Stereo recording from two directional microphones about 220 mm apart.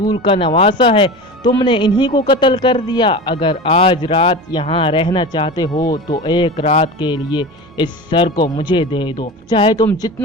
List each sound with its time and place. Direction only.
0.1 s a man's voice: 25° left (ahead or behind)